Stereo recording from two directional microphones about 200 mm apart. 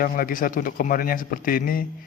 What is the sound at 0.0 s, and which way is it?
Speech, 45° left (ahead or behind).